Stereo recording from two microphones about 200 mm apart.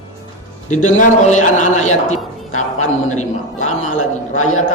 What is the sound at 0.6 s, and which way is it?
A man's voice, 35° left (ahead or behind).